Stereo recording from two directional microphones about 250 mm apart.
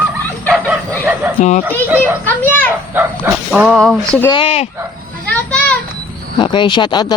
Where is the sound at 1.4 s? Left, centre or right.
Left.